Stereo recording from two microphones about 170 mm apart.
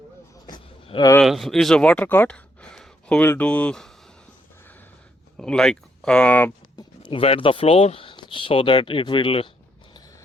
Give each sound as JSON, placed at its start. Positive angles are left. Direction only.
{"t": 0.4, "sound": "a sound", "side_deg": 25}
{"t": 1.2, "sound": "speech", "side_deg": 0}
{"t": 5.4, "sound": "speech", "side_deg": 5}
{"t": 6.7, "sound": "speech", "side_deg": 30}